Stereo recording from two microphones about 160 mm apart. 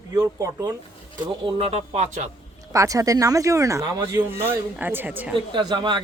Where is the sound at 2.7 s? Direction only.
20° right (ahead or behind).